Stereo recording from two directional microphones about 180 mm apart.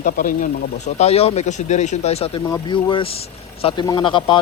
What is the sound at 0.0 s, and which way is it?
Speech, 50° left (ahead or behind).